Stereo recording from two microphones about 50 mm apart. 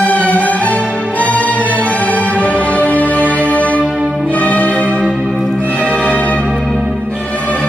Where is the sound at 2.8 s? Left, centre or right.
Right.